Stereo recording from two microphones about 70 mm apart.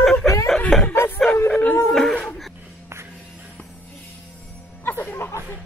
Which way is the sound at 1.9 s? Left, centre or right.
Centre.